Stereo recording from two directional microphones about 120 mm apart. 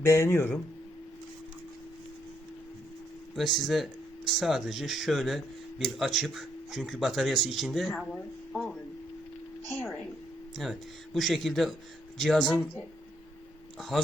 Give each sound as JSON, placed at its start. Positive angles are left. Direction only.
{"t": 0.0, "sound": "speech", "side_deg": 20}
{"t": 3.3, "sound": "speech", "side_deg": 0}
{"t": 9.6, "sound": "speech", "side_deg": 20}
{"t": 10.5, "sound": "speech", "side_deg": 0}
{"t": 13.7, "sound": "speech", "side_deg": 0}